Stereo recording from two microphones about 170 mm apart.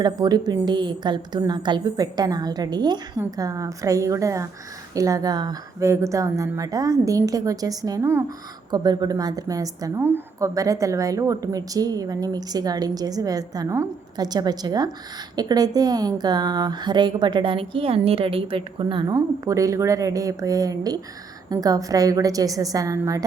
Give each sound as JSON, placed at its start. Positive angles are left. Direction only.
{"t": 0.0, "sound": "a woman's voice", "side_deg": -25}